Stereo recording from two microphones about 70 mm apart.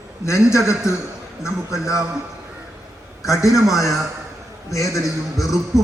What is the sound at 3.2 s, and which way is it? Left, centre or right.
Speech, left.